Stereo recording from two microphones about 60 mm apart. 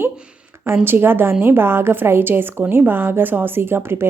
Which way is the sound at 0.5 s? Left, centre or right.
Right.